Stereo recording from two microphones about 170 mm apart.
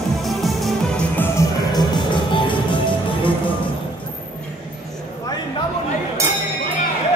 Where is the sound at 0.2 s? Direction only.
Centre (ahead or behind); by 3.5 s 30° left (ahead or behind).